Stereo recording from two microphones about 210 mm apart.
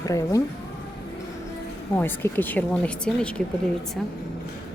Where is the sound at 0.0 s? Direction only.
15° left (ahead or behind).